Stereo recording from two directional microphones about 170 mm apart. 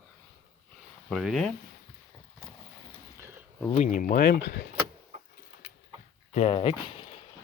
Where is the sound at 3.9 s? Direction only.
55° left (ahead or behind).